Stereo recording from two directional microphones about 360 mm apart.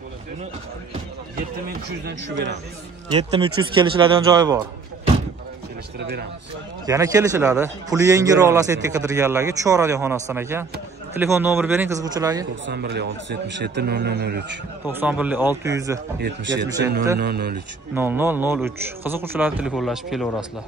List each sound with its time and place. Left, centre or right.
1.7 s speech: right
3.1 s a man's voice: centre
6.9 s a man's voice: centre
12.6 s speech: right
14.9 s a man's voice: centre
16.2 s speech: right
17.9 s a man's voice: centre